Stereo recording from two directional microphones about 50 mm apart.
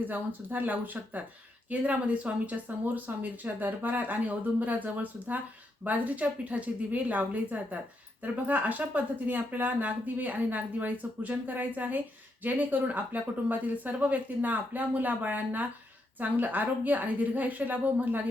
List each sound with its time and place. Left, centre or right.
0.0 s a woman's voice: right